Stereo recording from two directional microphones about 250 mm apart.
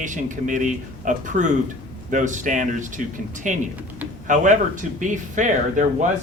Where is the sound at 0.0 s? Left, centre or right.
Right.